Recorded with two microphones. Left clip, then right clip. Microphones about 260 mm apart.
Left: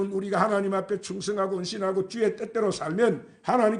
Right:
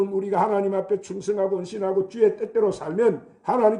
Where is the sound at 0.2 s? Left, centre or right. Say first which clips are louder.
Right 1 dB; left.